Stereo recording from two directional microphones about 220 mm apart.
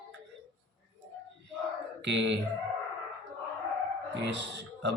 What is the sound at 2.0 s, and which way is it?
Speech, 55° right (ahead or behind).